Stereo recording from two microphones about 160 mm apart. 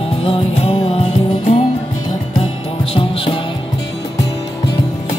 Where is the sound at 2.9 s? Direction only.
35° left (ahead or behind).